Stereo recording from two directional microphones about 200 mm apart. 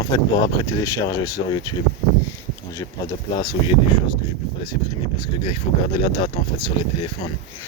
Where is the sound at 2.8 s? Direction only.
15° left (ahead or behind).